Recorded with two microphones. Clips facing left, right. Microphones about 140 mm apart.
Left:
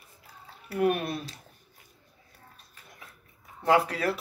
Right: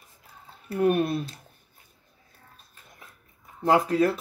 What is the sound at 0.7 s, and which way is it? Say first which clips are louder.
Speech: right 3 dB; 25° right (ahead or behind).